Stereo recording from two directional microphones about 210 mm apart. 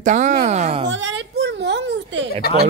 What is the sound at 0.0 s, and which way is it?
Speech, 35° right (ahead or behind).